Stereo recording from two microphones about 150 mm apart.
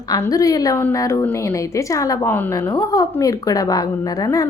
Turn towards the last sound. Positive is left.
turn(degrees=25)  # may be behind; listen again after turning